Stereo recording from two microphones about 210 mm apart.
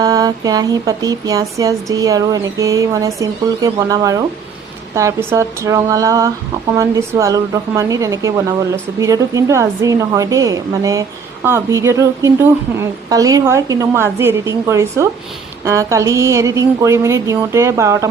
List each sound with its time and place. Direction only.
0.0 s a woman's voice: 15° right (ahead or behind)